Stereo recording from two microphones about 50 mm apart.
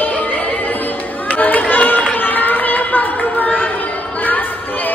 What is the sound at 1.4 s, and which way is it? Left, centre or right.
Run, left.